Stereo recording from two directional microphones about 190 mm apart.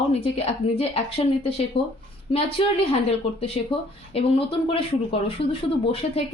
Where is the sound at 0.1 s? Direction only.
30° left (ahead or behind).